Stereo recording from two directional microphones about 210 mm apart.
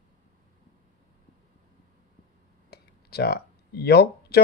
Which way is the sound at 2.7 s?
50° left (ahead or behind).